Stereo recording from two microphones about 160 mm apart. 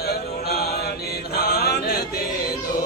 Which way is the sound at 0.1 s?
85° left.